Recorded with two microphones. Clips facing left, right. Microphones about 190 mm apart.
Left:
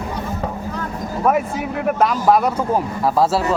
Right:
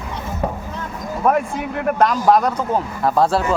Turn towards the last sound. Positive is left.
turn(degrees=5)  # may be behind; listen again after turning